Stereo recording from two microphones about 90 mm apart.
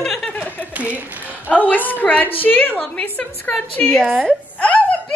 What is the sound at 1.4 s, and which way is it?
A woman's voice, 20° left (ahead or behind).